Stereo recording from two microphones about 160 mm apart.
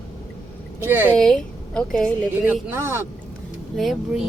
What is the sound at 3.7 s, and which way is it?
Speech, centre (ahead or behind).